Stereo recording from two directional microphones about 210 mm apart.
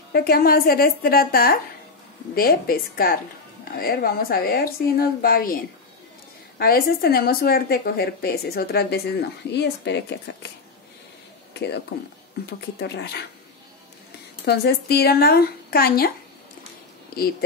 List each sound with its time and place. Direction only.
0.1 s a woman's voice: 45° left (ahead or behind)
6.6 s a woman's voice: 45° left (ahead or behind)
11.5 s a woman's voice: 55° left (ahead or behind)
14.4 s a woman's voice: 50° left (ahead or behind)
17.1 s a woman's voice: 45° left (ahead or behind)